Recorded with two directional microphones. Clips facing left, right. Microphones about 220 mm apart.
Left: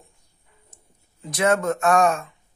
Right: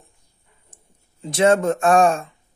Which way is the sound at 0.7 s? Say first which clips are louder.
Even; 30° right (ahead or behind).